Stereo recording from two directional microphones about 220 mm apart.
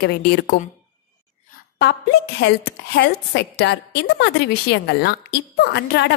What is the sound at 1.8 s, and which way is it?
A woman's voice, 50° left (ahead or behind).